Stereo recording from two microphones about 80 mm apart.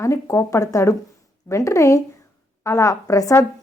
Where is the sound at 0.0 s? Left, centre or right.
Left.